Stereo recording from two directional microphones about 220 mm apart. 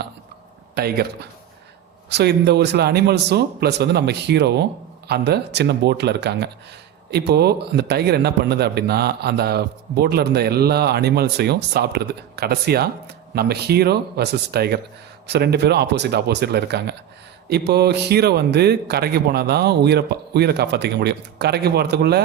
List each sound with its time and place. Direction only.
0.8 s a man's voice: 45° right (ahead or behind)